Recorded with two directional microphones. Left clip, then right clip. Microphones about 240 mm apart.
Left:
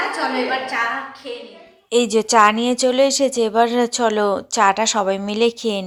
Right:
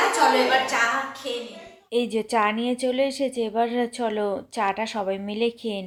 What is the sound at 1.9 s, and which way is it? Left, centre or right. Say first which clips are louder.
Speech: left 9 dB; centre.